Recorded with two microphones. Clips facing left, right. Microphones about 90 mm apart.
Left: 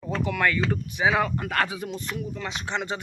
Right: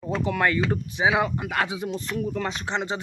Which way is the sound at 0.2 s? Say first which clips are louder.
Right 1 dB; 30° right (ahead or behind).